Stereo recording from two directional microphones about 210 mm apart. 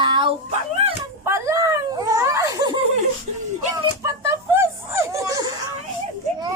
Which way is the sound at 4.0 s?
15° right (ahead or behind).